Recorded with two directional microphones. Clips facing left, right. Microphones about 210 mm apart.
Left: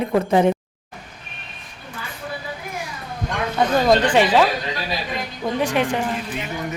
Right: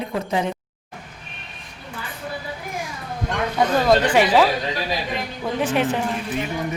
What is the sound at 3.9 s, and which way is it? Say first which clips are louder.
Speech: even; 10° right (ahead or behind).